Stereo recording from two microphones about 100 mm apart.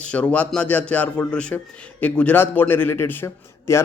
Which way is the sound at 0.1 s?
10° left (ahead or behind).